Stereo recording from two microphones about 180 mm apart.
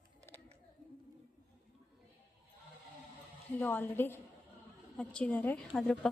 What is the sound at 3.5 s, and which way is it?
A woman's voice, 10° left (ahead or behind).